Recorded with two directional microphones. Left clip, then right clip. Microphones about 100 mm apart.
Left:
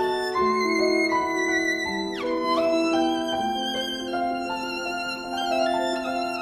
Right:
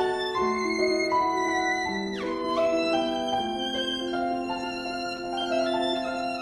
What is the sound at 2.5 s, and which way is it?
Music, 45° left (ahead or behind).